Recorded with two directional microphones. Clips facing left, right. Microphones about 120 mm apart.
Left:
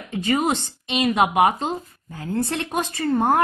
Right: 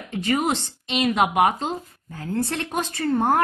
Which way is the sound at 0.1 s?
10° left (ahead or behind).